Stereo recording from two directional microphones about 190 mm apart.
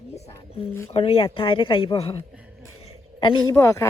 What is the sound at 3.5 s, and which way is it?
Speech, 15° left (ahead or behind).